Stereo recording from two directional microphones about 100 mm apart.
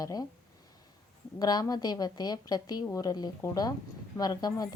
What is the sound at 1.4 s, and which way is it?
A woman's voice, 40° left (ahead or behind).